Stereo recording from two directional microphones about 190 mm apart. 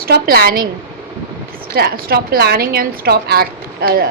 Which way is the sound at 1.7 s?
55° right (ahead or behind).